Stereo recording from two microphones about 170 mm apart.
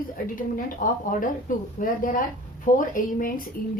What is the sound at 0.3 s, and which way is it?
A woman's voice, 55° left (ahead or behind).